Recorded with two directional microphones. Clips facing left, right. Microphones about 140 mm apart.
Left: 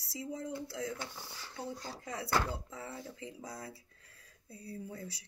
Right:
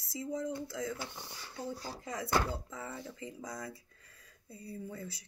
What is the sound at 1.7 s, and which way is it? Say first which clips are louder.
Speech: right 2 dB; 5° right (ahead or behind).